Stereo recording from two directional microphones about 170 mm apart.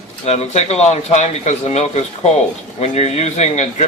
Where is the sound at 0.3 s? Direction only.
40° left (ahead or behind).